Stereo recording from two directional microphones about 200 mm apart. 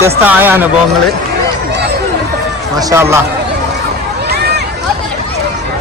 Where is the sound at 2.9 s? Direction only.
15° right (ahead or behind).